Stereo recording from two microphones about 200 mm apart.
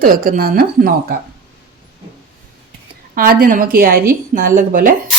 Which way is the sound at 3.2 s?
45° right (ahead or behind).